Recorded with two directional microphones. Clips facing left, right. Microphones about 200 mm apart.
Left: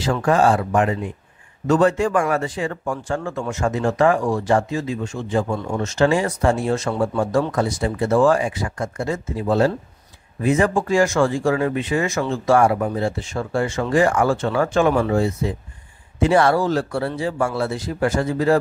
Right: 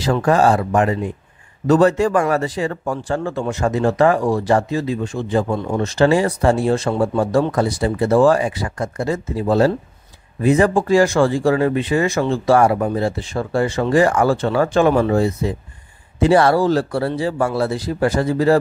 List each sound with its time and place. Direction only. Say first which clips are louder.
0.0 s speech: right 2 dB; 40° right (ahead or behind)